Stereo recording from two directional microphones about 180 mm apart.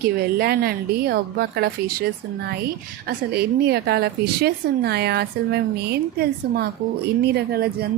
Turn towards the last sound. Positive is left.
turn(degrees=-60)  # may be behind; listen again after turning